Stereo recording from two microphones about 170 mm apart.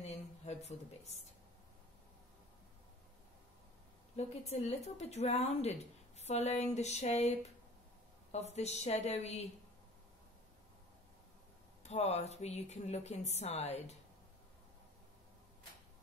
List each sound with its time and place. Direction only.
0.0 s a woman's voice: 40° left (ahead or behind)
4.5 s a woman's voice: 40° left (ahead or behind)
8.5 s a woman's voice: 40° left (ahead or behind)
11.8 s a woman's voice: 40° left (ahead or behind)